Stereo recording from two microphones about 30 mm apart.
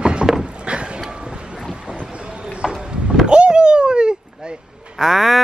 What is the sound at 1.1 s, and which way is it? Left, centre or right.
Vehicle, right.